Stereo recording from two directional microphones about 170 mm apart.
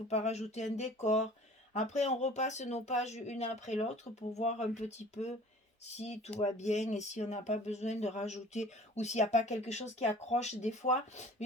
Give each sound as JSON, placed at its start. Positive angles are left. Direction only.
{"t": 0.1, "sound": "speech", "side_deg": 40}